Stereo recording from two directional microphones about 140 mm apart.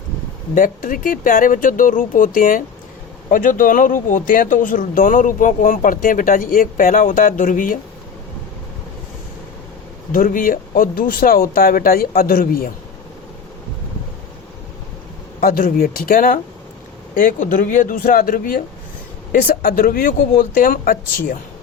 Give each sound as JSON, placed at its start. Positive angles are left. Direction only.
{"t": 0.5, "sound": "speech", "side_deg": 75}
{"t": 10.1, "sound": "speech", "side_deg": 75}
{"t": 15.4, "sound": "speech", "side_deg": 90}
{"t": 17.2, "sound": "speech", "side_deg": 70}